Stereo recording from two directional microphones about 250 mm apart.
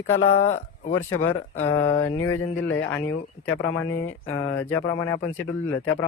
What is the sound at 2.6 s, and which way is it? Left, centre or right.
Speech, left.